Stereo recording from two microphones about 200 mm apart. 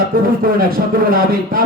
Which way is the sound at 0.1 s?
45° right (ahead or behind).